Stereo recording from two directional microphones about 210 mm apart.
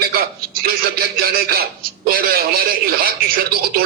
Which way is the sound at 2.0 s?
45° right (ahead or behind).